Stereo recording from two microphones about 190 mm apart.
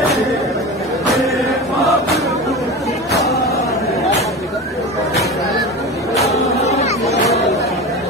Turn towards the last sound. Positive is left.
turn(degrees=35)  # may be behind; listen again after turning